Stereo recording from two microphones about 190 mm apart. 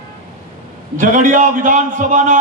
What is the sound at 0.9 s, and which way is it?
A man's voice, 45° right (ahead or behind).